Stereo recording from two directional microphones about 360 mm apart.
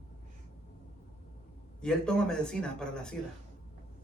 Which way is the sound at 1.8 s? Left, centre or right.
Centre.